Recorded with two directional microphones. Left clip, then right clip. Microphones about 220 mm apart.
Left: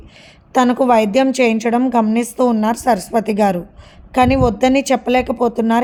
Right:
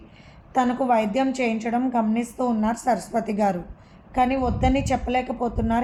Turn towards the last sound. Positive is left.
turn(degrees=45)  # may be behind; listen again after turning